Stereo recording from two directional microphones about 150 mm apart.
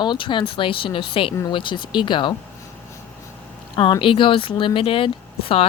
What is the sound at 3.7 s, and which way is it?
Speech, 30° left (ahead or behind).